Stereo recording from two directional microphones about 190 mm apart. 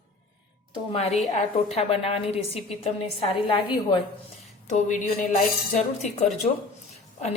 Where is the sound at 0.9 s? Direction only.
35° left (ahead or behind).